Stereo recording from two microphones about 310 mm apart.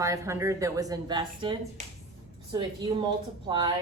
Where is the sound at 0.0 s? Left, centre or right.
Centre.